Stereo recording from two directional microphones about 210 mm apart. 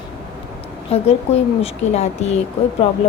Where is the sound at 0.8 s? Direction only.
30° left (ahead or behind).